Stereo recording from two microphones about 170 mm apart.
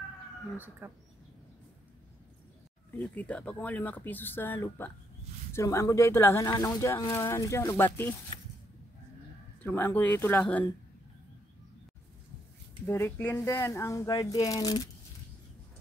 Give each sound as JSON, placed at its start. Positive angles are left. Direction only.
{"t": 0.6, "sound": "speech", "side_deg": -10}
{"t": 3.0, "sound": "speech", "side_deg": 5}
{"t": 9.6, "sound": "speech", "side_deg": 10}
{"t": 12.8, "sound": "speech", "side_deg": 15}